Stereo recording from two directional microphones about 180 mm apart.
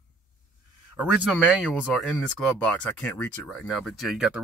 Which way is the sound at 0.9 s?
5° right (ahead or behind).